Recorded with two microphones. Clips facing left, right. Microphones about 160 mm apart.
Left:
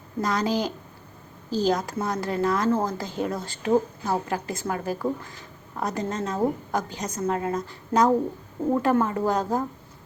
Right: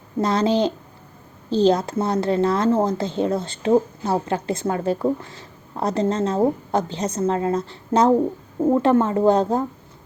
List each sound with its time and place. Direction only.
0.2 s a woman's voice: 25° right (ahead or behind)